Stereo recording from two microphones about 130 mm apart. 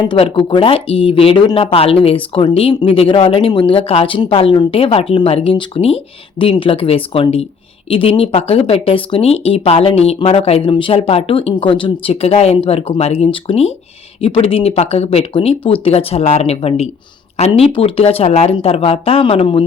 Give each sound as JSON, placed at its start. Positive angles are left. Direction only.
{"t": 0.0, "sound": "speech", "side_deg": 40}